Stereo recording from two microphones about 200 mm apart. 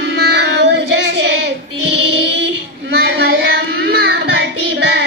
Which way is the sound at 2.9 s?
55° right (ahead or behind).